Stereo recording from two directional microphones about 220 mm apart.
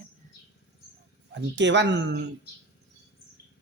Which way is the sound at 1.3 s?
55° right (ahead or behind).